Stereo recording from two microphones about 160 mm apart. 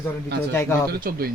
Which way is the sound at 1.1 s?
70° right (ahead or behind).